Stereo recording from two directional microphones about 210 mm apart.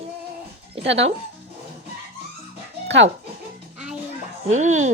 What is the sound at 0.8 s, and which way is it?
Speech, 60° right (ahead or behind).